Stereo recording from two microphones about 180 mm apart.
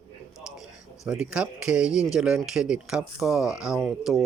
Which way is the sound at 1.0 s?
5° right (ahead or behind).